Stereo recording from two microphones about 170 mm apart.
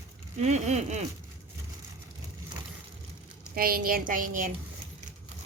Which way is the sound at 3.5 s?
60° right (ahead or behind).